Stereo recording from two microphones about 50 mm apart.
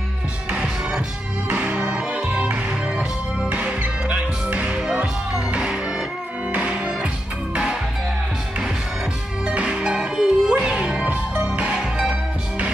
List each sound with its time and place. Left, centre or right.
1.5 s music: right
3.4 s music: right
9.5 s music: right
11.1 s music: right
11.7 s music: centre